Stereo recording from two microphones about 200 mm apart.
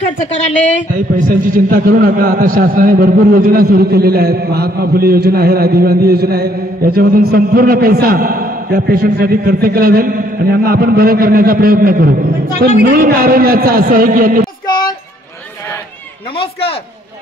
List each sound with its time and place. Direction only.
1.3 s a man's voice: 45° right (ahead or behind)
16.3 s speech: 30° left (ahead or behind)